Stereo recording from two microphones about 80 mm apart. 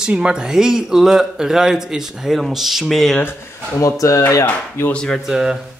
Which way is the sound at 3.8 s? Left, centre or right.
Left.